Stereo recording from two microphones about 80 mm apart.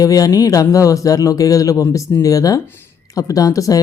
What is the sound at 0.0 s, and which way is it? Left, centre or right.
Speech, left.